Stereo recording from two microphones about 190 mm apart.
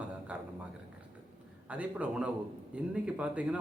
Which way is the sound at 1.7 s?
5° right (ahead or behind).